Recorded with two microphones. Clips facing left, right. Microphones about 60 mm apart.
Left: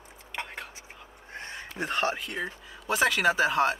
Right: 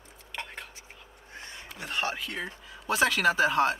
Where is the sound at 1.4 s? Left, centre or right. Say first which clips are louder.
Left 7 dB; left.